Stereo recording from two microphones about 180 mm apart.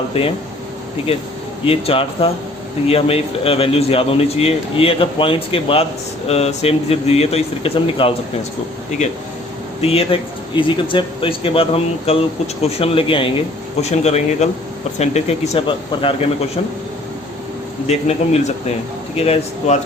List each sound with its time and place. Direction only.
0.1 s speech: 30° left (ahead or behind)
1.6 s speech: 30° left (ahead or behind)
9.8 s speech: 35° left (ahead or behind)
17.8 s speech: 35° left (ahead or behind)